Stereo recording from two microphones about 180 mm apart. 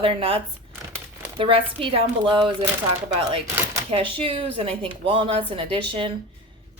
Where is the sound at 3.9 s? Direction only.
30° right (ahead or behind).